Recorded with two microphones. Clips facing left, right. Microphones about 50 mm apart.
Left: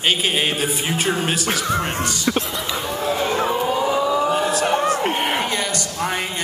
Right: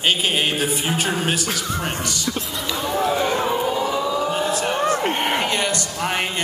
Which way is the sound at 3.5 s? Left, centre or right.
Centre.